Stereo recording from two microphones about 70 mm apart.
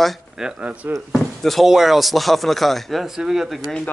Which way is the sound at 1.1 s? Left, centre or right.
Centre.